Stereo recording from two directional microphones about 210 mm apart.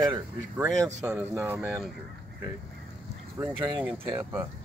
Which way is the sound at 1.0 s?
5° right (ahead or behind).